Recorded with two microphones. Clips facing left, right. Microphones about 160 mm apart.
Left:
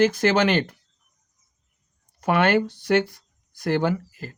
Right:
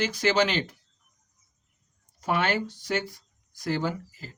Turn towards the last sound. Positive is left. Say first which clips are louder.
# left 7 dB
turn(degrees=60)  # may be behind; listen again after turning